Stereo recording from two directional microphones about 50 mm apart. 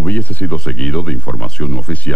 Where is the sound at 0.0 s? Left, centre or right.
Left.